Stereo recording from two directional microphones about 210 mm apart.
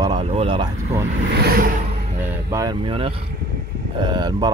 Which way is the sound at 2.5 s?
20° right (ahead or behind).